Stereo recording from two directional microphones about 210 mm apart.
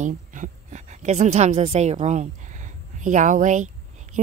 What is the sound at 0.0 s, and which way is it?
A woman's voice, 35° right (ahead or behind).